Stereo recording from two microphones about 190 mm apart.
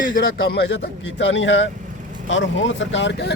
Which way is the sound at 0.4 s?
55° left (ahead or behind).